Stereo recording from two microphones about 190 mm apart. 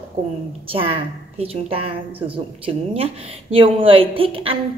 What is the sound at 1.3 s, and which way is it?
Speech, 30° right (ahead or behind).